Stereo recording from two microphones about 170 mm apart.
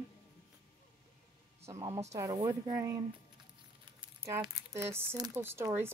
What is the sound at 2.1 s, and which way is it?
Speech, 20° right (ahead or behind).